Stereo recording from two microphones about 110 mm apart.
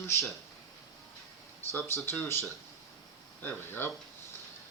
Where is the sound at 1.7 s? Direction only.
20° left (ahead or behind).